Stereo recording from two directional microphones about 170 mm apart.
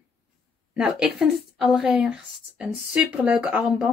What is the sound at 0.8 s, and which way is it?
A woman's voice, 5° right (ahead or behind).